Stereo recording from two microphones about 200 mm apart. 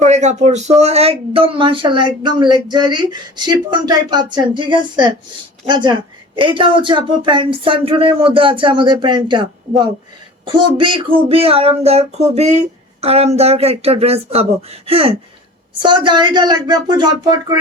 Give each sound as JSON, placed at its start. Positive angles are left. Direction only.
{"t": 0.0, "sound": "speech", "side_deg": -35}